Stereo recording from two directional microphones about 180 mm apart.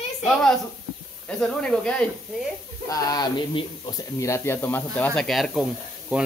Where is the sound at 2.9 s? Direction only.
20° left (ahead or behind).